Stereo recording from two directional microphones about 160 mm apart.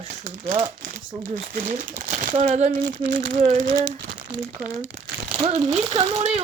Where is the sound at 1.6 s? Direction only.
50° right (ahead or behind).